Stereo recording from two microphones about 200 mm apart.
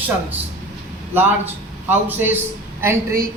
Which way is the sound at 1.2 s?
10° right (ahead or behind).